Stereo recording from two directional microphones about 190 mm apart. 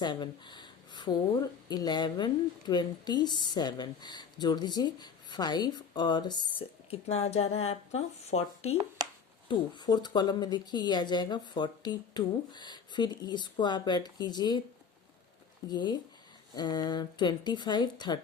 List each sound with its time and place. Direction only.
0.0 s speech: 25° left (ahead or behind)
9.5 s speech: 20° left (ahead or behind)
15.7 s speech: 25° left (ahead or behind)